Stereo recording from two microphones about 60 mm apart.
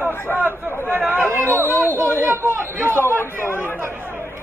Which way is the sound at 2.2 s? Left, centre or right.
Right.